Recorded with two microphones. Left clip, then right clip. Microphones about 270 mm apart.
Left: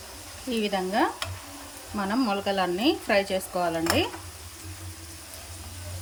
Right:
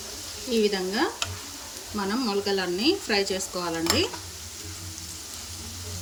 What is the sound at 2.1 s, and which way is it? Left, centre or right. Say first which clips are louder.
Speech: even; centre.